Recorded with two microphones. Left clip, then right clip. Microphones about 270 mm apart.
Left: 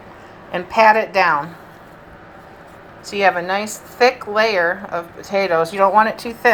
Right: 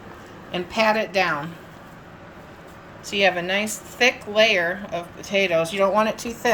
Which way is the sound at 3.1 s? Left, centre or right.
Left.